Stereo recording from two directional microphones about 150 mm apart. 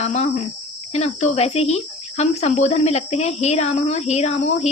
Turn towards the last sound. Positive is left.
turn(degrees=45)  # may be behind; listen again after turning